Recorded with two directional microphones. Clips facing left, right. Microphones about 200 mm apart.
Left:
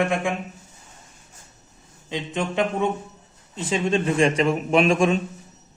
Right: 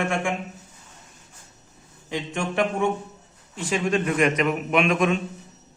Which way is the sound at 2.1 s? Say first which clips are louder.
Left 1 dB; 20° left (ahead or behind).